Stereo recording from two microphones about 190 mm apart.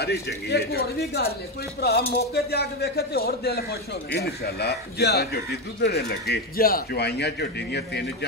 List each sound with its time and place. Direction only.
0.0 s a man's voice: 55° left (ahead or behind)